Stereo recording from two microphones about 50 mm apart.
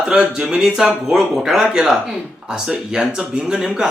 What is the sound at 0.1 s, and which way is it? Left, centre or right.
Speech, centre.